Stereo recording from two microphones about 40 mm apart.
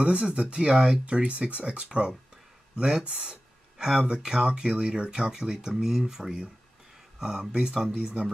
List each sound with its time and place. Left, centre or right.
0.0 s speech: right
0.7 s speech: centre
1.0 s speech: right
3.7 s speech: centre
4.1 s speech: right
5.3 s speech: centre
7.9 s speech: right